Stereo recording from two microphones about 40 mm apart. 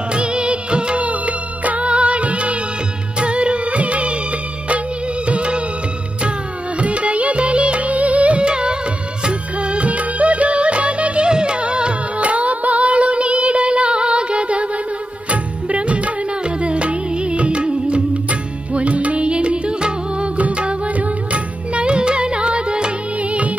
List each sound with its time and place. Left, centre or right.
0.1 s music of bollywood: right
6.8 s music: right
9.2 s music of bollywood: right
12.3 s music: right